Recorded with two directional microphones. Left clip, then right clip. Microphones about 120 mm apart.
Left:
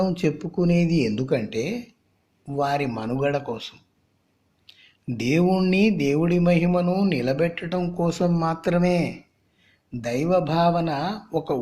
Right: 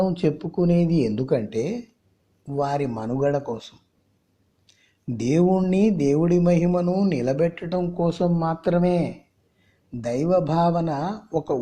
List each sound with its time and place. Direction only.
0.0 s a man's voice: 15° right (ahead or behind)
9.9 s a man's voice: 45° right (ahead or behind)